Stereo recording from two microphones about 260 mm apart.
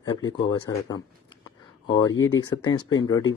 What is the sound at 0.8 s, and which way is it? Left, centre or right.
A man's voice, centre.